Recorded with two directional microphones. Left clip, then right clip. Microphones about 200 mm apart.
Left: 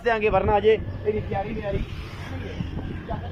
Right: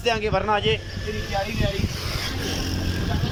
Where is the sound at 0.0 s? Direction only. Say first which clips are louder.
Left 1 dB; centre (ahead or behind).